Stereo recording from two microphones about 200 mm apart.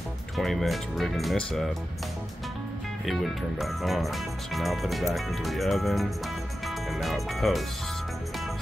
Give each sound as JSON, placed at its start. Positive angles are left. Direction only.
{"t": 0.4, "sound": "speech", "side_deg": 0}
{"t": 3.1, "sound": "speech", "side_deg": 0}